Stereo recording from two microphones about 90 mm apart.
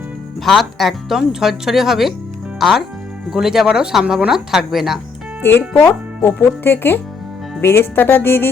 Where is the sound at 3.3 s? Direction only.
5° right (ahead or behind).